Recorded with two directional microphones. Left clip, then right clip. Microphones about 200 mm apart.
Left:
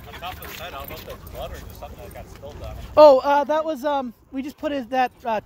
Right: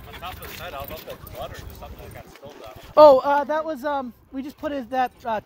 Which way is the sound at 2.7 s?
Centre (ahead or behind).